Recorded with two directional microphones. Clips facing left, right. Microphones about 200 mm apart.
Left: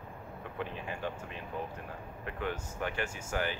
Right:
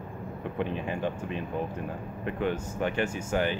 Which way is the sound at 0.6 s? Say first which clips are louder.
Right 7 dB; 20° right (ahead or behind).